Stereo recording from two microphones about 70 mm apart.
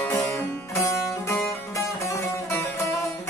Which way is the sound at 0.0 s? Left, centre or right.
Left.